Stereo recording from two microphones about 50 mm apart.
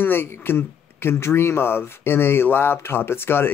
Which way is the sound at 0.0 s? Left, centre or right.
Left.